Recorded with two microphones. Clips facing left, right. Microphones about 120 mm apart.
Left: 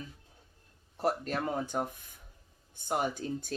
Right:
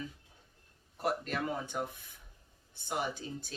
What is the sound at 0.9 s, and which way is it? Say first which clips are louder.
A man's voice: left 3 dB; 40° left (ahead or behind).